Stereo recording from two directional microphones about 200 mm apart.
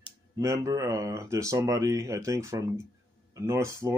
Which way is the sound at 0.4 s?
15° right (ahead or behind).